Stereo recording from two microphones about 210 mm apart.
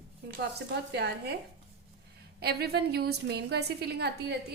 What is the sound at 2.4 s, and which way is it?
A woman's voice, 50° right (ahead or behind).